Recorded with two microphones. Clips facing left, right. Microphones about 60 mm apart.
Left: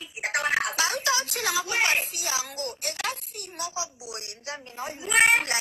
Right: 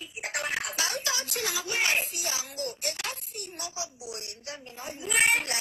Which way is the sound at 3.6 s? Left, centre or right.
Left.